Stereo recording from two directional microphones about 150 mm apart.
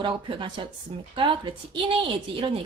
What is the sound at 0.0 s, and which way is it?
Speech, 30° right (ahead or behind).